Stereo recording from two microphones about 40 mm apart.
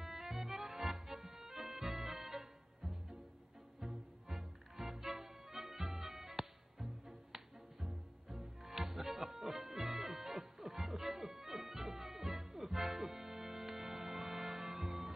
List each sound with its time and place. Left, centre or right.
0.0 s accordion: centre
3.8 s music: centre